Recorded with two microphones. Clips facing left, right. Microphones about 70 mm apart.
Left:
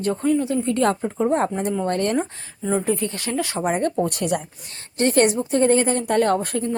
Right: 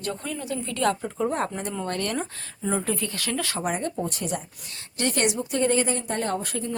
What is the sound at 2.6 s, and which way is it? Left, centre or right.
Speech, centre.